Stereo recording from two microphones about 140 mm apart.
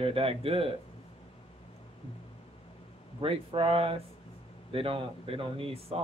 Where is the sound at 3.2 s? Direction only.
40° right (ahead or behind).